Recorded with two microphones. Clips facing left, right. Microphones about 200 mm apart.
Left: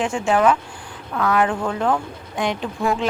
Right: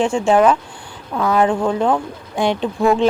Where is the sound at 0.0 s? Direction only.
25° right (ahead or behind).